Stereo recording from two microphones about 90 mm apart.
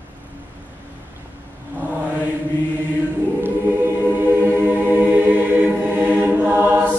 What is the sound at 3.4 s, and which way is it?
Choir, 25° right (ahead or behind).